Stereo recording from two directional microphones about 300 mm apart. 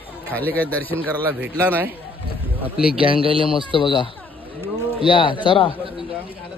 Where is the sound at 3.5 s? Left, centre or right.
Centre.